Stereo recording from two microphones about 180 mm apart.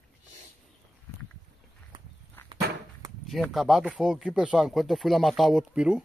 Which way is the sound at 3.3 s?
Centre (ahead or behind).